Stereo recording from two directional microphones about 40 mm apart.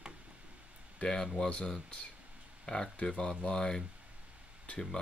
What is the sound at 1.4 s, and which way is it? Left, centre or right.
Speech, left.